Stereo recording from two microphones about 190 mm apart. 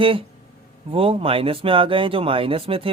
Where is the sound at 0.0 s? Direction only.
25° right (ahead or behind).